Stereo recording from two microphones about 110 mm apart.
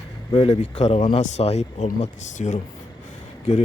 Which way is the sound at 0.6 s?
60° left (ahead or behind).